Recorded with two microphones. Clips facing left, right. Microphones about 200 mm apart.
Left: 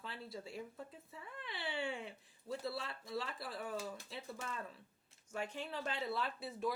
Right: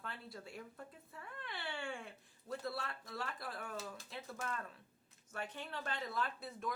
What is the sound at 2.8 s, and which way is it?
Speech, 25° left (ahead or behind).